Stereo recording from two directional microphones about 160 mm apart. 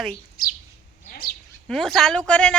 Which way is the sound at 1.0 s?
65° left (ahead or behind).